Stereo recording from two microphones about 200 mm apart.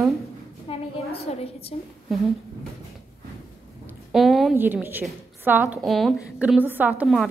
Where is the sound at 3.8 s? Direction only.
Centre (ahead or behind).